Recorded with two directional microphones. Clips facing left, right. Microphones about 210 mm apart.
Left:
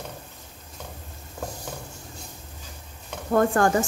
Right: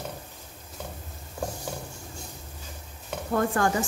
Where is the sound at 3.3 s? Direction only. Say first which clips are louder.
Left 5 dB; 50° left (ahead or behind).